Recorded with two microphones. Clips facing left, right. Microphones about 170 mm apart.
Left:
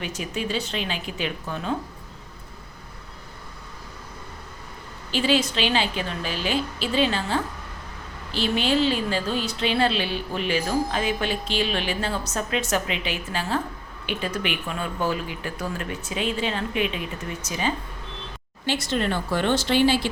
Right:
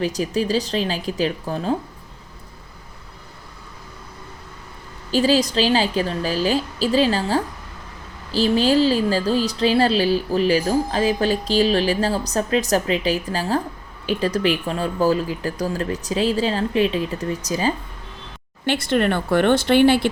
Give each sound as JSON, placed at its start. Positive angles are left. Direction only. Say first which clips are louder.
{"t": 0.0, "sound": "a woman's voice", "louder": "right 8 dB", "side_deg": -35}
{"t": 5.1, "sound": "a woman's voice", "louder": "right 5 dB", "side_deg": -40}
{"t": 18.6, "sound": "speech", "louder": "right 6 dB", "side_deg": -60}